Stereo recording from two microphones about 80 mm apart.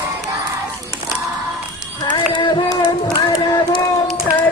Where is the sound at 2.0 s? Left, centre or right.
Left.